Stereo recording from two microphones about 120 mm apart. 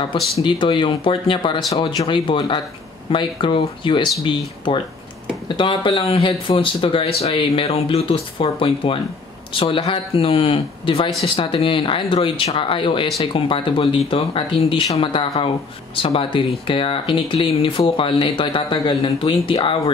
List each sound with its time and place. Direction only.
0.4 s speech: 45° left (ahead or behind)